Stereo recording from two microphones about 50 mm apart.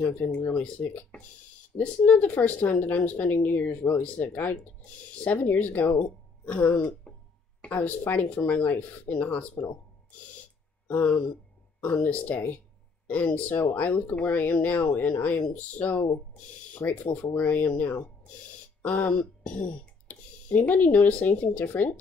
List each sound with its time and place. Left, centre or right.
0.0 s speech: left
7.7 s speech: left
10.9 s speech: left
17.4 s speech: left